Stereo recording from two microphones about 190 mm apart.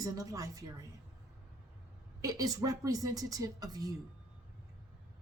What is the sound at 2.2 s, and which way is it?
Speech, 20° right (ahead or behind).